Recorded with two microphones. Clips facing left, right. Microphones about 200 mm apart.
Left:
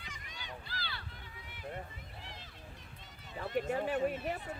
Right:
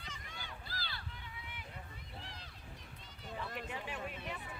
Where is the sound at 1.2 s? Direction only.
40° left (ahead or behind).